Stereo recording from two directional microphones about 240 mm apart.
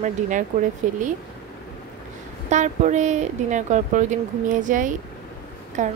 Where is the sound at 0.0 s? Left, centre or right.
Right.